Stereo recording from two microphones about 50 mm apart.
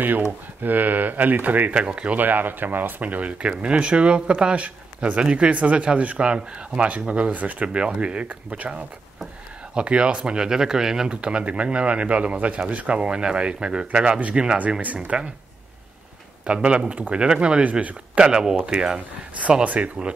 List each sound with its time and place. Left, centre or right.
0.6 s speech: right
1.8 s speech: right
2.1 s speech: right
9.8 s speech: centre
16.4 s speech: right
18.9 s speech: right